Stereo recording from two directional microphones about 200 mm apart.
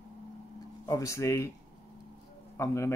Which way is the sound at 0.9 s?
15° left (ahead or behind).